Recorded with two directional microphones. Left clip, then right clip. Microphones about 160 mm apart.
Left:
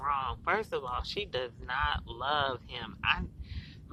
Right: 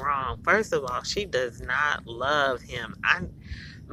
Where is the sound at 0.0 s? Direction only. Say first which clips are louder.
Right 5 dB; 20° right (ahead or behind).